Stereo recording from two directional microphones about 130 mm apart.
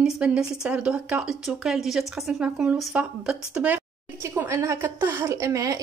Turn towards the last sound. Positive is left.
turn(degrees=-25)  # may be behind; listen again after turning